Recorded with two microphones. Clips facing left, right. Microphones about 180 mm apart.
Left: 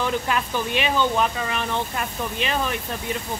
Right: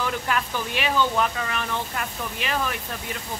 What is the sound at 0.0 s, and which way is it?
Speech, 20° left (ahead or behind).